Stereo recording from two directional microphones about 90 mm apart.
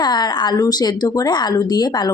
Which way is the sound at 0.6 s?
45° left (ahead or behind).